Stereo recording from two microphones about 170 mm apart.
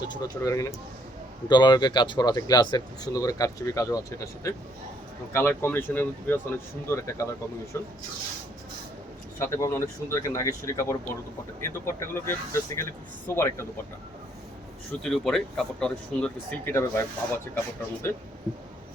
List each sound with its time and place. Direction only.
0.1 s speech: 20° left (ahead or behind)
9.4 s speech: 15° left (ahead or behind)
15.0 s speech: centre (ahead or behind)